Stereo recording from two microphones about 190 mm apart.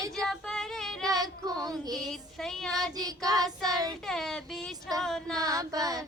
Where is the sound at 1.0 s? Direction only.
20° right (ahead or behind).